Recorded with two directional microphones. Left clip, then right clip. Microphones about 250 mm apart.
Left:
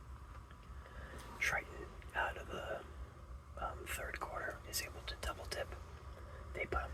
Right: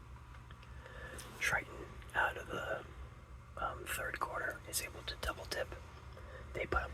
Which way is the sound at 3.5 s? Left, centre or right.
Right.